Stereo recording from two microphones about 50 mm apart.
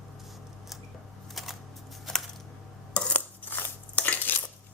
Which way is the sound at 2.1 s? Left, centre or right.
Centre.